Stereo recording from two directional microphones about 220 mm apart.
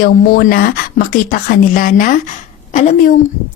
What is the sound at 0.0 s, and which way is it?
Speech, 45° left (ahead or behind).